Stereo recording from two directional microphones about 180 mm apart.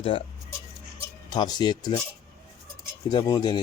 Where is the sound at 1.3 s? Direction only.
25° left (ahead or behind).